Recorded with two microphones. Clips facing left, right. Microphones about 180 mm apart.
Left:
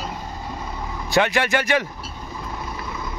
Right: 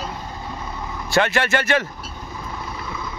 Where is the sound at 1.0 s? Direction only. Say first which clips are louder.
Even; 15° left (ahead or behind).